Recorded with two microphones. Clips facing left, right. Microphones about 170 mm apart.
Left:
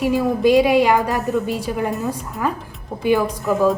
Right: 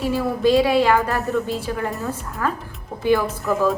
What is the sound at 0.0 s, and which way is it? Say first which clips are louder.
A woman's voice: left 3 dB; 15° left (ahead or behind).